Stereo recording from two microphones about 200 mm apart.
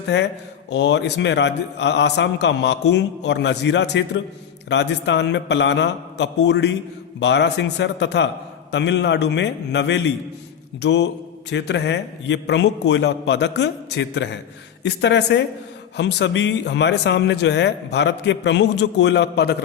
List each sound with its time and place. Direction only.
0.1 s a man's voice: 60° left (ahead or behind)